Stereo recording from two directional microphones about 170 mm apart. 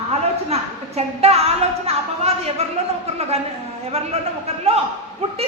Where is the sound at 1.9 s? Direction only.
35° right (ahead or behind).